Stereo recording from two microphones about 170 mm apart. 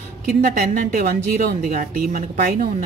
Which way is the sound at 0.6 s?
60° right (ahead or behind).